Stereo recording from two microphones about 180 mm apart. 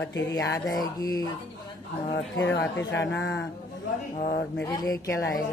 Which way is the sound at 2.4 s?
80° left.